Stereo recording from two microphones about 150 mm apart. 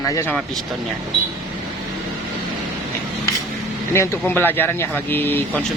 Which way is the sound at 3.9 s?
20° left (ahead or behind).